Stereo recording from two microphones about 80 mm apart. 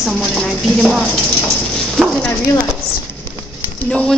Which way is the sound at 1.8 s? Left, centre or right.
Centre.